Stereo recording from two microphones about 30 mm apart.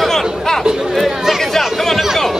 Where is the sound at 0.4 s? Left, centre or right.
Centre.